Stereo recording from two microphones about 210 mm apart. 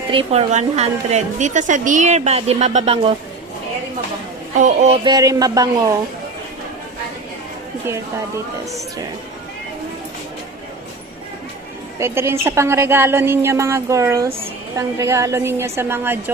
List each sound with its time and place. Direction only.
0.1 s a woman's voice: 30° right (ahead or behind)
4.6 s a woman's voice: 35° right (ahead or behind)
5.0 s a woman's voice: 15° right (ahead or behind)
11.9 s a woman's voice: 10° right (ahead or behind)